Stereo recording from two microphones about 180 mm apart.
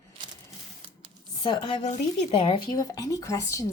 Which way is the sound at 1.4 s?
25° left (ahead or behind).